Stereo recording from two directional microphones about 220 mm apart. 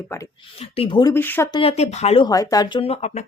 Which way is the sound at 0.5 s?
25° left (ahead or behind).